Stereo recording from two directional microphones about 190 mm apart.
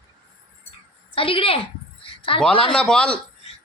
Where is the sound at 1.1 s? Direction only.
30° left (ahead or behind).